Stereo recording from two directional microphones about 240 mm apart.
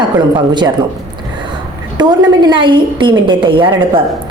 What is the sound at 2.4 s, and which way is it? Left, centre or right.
A woman's voice, centre.